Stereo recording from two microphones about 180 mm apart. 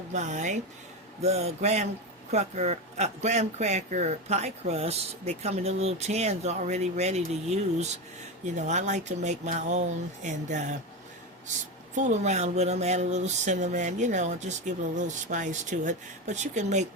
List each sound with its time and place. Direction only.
0.1 s speech: 40° right (ahead or behind)
8.5 s speech: 40° right (ahead or behind)
11.9 s speech: 40° right (ahead or behind)